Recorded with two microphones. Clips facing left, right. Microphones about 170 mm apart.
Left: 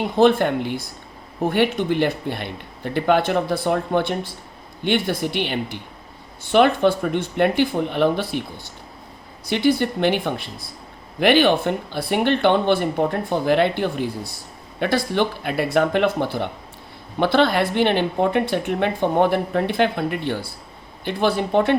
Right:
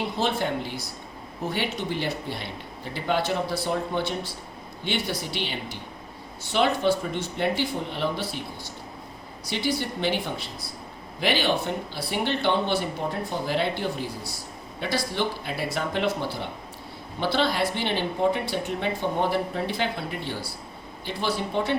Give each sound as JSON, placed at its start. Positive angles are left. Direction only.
{"t": 0.2, "sound": "speech", "side_deg": 55}
{"t": 9.5, "sound": "speech", "side_deg": 55}